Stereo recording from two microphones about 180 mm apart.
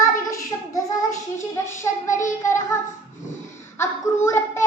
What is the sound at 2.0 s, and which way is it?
Child singing, 45° left (ahead or behind).